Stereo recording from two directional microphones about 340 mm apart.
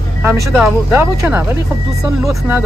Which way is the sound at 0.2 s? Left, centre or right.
Centre.